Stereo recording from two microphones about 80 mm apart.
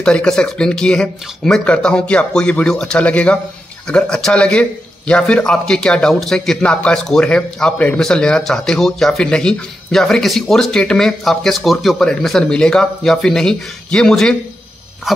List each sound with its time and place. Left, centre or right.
0.0 s speech: centre
15.1 s dog: centre